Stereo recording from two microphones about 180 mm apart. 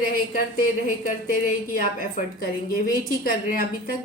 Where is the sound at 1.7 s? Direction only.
50° left (ahead or behind).